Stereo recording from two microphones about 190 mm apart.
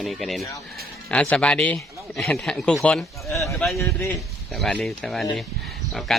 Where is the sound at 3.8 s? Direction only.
15° left (ahead or behind).